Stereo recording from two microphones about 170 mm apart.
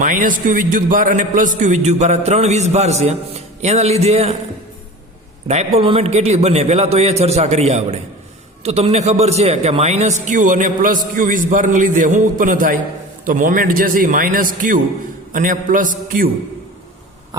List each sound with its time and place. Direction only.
0.0 s a man's voice: 50° right (ahead or behind)
5.5 s a man's voice: 40° right (ahead or behind)